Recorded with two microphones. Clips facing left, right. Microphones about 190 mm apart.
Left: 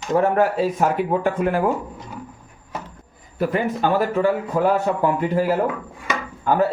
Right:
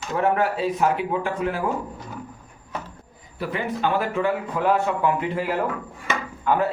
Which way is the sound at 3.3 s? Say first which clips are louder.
Left 6 dB; 45° left (ahead or behind).